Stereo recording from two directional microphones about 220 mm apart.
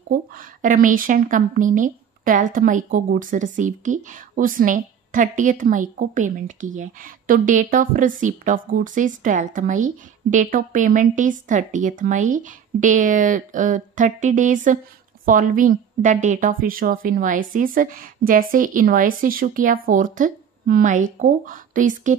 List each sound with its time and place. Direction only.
0.1 s a woman's voice: 40° right (ahead or behind)